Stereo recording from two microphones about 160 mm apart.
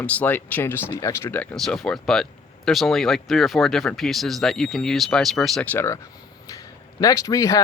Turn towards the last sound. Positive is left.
turn(degrees=20)  # may be behind; listen again after turning